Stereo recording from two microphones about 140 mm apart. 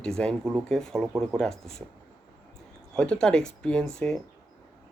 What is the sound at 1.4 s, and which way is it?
Speech, 5° left (ahead or behind).